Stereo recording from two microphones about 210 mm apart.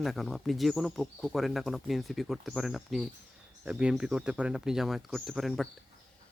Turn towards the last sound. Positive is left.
turn(degrees=0)  # may be behind; listen again after turning